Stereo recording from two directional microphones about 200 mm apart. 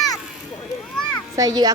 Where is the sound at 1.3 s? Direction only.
15° right (ahead or behind).